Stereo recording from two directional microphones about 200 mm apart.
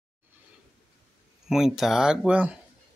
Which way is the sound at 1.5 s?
Centre (ahead or behind).